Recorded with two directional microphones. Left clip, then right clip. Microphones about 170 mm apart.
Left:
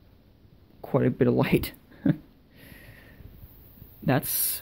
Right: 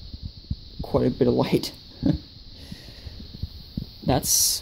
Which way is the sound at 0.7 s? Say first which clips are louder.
Right 2 dB; centre (ahead or behind).